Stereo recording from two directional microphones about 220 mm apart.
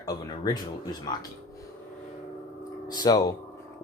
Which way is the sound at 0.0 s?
15° left (ahead or behind).